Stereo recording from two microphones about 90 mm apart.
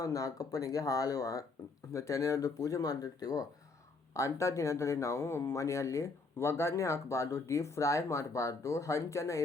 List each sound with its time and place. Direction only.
0.0 s speech: 40° left (ahead or behind)